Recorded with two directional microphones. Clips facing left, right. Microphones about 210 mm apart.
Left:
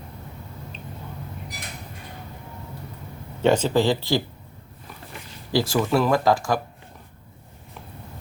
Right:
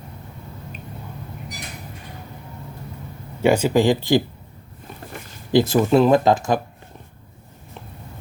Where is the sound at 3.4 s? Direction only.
10° right (ahead or behind).